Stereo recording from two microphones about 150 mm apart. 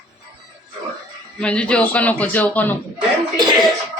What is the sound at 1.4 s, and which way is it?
A man's voice, 5° left (ahead or behind).